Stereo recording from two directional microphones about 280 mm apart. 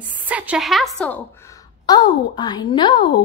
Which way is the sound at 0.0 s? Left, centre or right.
Centre.